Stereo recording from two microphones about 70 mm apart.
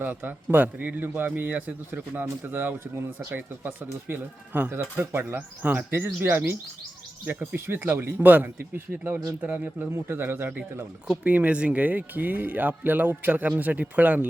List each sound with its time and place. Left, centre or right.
0.0 s a man's voice: right
9.9 s speech: right
11.1 s a man's voice: centre